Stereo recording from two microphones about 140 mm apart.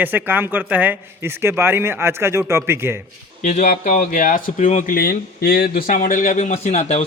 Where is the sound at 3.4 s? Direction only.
55° left (ahead or behind).